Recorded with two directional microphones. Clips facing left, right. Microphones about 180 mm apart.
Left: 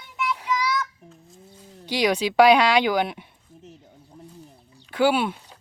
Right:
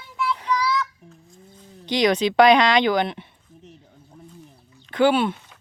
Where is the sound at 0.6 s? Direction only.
20° left (ahead or behind).